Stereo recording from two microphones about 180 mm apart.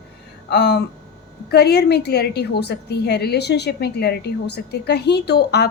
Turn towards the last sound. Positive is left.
turn(degrees=65)  # may be behind; listen again after turning